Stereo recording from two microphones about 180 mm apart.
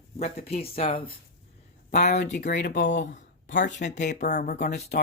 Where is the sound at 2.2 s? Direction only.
70° left (ahead or behind).